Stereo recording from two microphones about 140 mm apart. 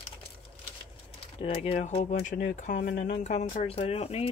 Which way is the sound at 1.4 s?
45° left (ahead or behind).